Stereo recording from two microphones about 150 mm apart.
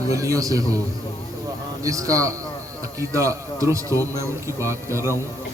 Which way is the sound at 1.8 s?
20° right (ahead or behind).